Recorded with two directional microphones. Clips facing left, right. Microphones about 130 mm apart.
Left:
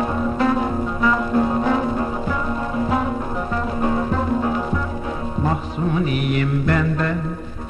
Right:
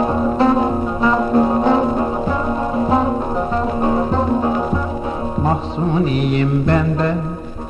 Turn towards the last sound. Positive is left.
turn(degrees=-30)  # may be behind; listen again after turning